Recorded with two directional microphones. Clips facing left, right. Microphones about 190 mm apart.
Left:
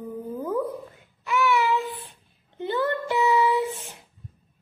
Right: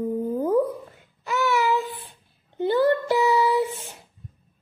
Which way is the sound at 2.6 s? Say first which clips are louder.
Right 6 dB; 35° right (ahead or behind).